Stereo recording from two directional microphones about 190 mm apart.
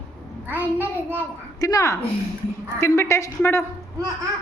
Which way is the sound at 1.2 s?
15° left (ahead or behind).